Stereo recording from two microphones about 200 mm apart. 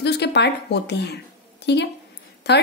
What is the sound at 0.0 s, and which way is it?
Speech, 55° left (ahead or behind).